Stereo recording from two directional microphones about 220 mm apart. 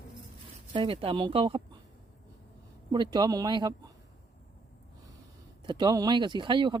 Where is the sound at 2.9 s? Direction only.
20° right (ahead or behind).